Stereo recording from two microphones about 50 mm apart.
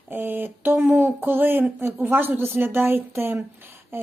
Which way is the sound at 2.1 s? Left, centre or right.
Right.